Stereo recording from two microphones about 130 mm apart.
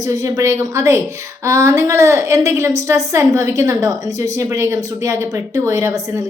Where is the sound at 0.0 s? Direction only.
25° right (ahead or behind).